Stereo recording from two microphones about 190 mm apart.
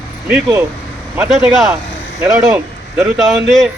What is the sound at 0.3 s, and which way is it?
Speech, 5° right (ahead or behind).